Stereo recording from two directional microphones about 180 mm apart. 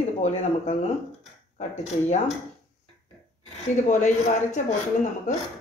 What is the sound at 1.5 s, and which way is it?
Speech, 40° left (ahead or behind).